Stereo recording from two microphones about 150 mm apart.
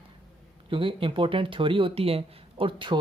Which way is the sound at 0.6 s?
35° right (ahead or behind).